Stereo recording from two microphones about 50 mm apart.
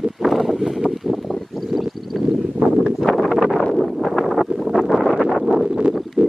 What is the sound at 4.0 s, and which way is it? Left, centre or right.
Wind noise, centre.